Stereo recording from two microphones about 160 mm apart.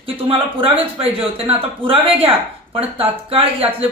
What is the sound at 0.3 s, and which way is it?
Speech, 35° right (ahead or behind).